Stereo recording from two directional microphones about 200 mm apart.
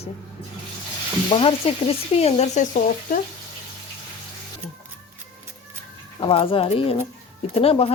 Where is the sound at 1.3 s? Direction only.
25° left (ahead or behind).